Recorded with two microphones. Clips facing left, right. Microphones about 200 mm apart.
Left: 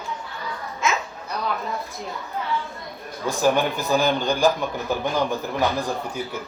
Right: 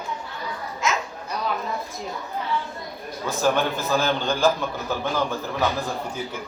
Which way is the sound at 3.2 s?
15° left (ahead or behind).